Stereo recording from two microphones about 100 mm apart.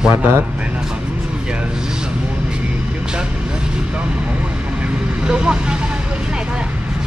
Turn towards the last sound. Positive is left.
turn(degrees=-10)  # may be behind; listen again after turning